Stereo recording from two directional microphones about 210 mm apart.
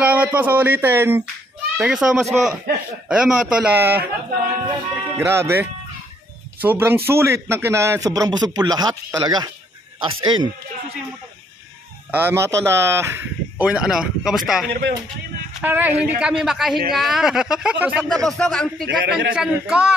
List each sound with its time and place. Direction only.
0.0 s a man's voice: 5° right (ahead or behind)
5.1 s speech: 10° right (ahead or behind)
12.1 s speech: 10° right (ahead or behind)
14.7 s a man's voice: 50° right (ahead or behind)
15.6 s a man's voice: 10° right (ahead or behind)
18.9 s a man's voice: 50° right (ahead or behind)
19.3 s a man's voice: 5° right (ahead or behind)